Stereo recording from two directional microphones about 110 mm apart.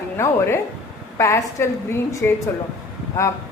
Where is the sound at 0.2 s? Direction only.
25° left (ahead or behind).